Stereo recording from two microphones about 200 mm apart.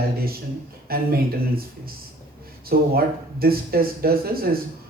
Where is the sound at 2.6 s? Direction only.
50° right (ahead or behind).